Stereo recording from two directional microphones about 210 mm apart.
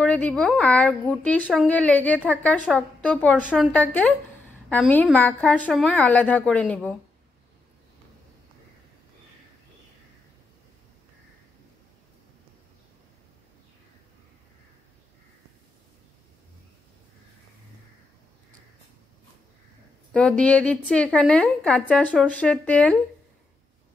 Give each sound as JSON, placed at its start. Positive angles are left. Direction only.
{"t": 0.0, "sound": "a woman's voice", "side_deg": 5}
{"t": 3.3, "sound": "a woman's voice", "side_deg": -5}
{"t": 3.7, "sound": "a woman's voice", "side_deg": 5}
{"t": 20.1, "sound": "a woman's voice", "side_deg": 5}